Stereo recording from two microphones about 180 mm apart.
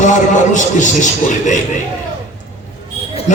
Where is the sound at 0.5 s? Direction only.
45° left (ahead or behind).